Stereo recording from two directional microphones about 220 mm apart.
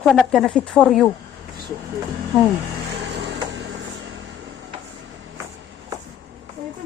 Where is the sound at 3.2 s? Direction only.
55° right (ahead or behind).